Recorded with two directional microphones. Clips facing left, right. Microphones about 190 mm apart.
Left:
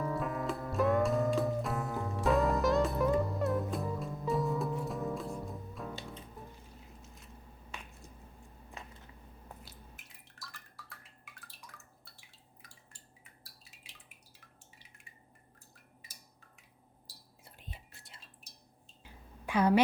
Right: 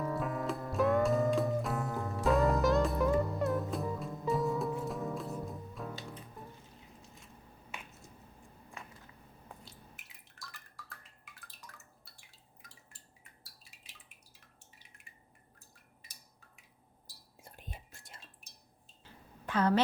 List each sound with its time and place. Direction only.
0.0 s music: centre (ahead or behind)
10.3 s drip: centre (ahead or behind)
17.4 s whispering: 45° right (ahead or behind)
19.0 s a sound: 10° left (ahead or behind)